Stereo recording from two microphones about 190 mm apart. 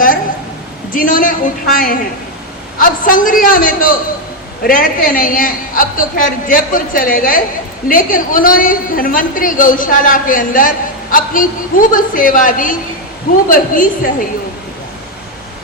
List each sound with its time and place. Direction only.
0.9 s a woman's voice: 45° left (ahead or behind)